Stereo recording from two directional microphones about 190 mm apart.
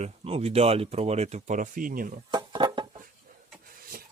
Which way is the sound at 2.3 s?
25° right (ahead or behind).